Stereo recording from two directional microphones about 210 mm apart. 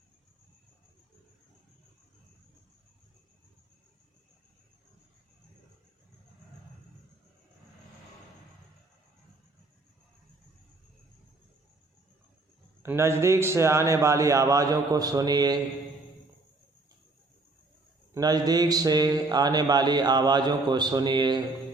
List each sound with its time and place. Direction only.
12.8 s a man's voice: 10° right (ahead or behind)
18.1 s speech: 20° right (ahead or behind)